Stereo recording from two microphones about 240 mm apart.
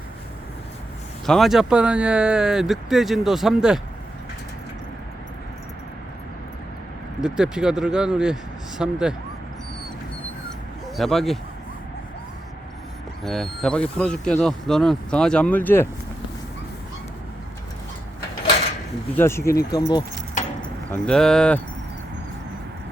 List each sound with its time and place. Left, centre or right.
1.3 s speech: centre
7.2 s speech: centre
10.9 s speech: centre
13.2 s speech: centre
19.1 s speech: centre
20.9 s speech: centre